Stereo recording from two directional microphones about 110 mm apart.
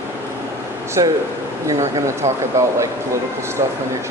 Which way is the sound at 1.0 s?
35° right (ahead or behind).